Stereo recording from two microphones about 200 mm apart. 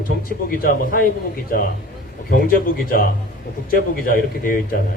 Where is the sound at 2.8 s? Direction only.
45° left (ahead or behind).